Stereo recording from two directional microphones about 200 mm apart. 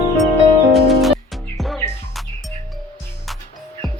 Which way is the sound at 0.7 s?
Centre (ahead or behind).